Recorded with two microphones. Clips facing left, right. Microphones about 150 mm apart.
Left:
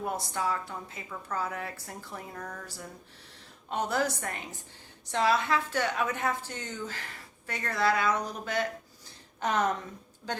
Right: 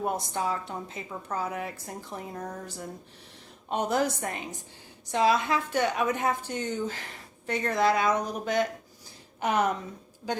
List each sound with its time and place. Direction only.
0.0 s a woman's voice: 20° right (ahead or behind)